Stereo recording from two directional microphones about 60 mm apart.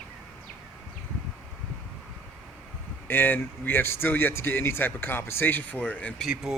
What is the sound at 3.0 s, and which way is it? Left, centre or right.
Speech, left.